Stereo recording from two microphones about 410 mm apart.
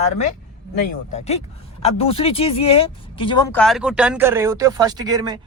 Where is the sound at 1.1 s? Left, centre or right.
Centre.